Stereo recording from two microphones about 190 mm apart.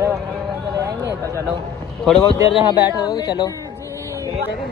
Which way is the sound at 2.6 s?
10° right (ahead or behind).